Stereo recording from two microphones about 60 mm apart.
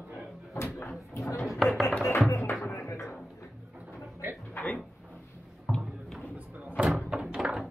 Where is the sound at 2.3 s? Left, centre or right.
Left.